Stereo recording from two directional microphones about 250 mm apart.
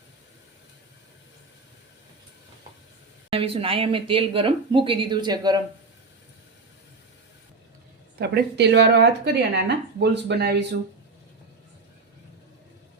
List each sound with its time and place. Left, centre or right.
3.2 s speech: right
8.2 s speech: right